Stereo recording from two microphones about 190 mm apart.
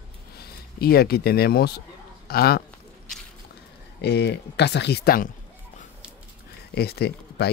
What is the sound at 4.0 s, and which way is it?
Speech, 60° left (ahead or behind).